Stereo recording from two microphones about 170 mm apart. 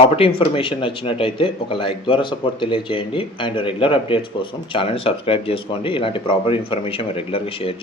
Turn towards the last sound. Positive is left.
turn(degrees=35)  # may be behind; listen again after turning